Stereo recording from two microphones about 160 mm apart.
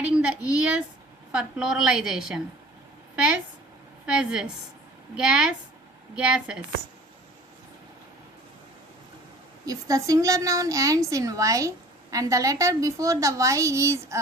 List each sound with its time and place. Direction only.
0.0 s a woman's voice: 5° right (ahead or behind)
4.0 s a woman's voice: 5° right (ahead or behind)
9.6 s a woman's voice: 20° right (ahead or behind)